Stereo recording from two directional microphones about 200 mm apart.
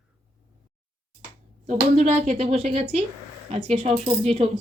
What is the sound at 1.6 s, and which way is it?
Speech, 35° right (ahead or behind).